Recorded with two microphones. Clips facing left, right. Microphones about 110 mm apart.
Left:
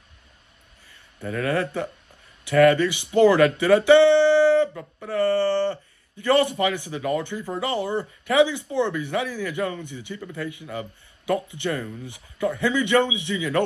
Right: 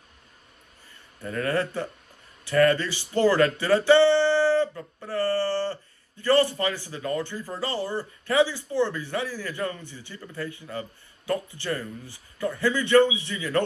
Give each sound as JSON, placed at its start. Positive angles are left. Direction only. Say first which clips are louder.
{"t": 1.2, "sound": "speech", "louder": "left 2 dB", "side_deg": 0}
{"t": 1.5, "sound": "speech", "louder": "left 1 dB", "side_deg": 15}